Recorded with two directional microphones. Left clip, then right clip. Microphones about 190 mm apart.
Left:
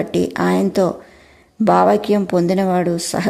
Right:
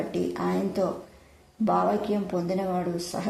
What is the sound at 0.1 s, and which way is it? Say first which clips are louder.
Speech: left 10 dB; 35° left (ahead or behind).